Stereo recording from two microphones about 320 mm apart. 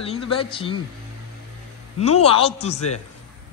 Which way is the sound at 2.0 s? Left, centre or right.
Centre.